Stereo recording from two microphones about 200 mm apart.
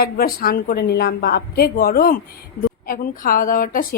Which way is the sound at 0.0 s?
50° left (ahead or behind).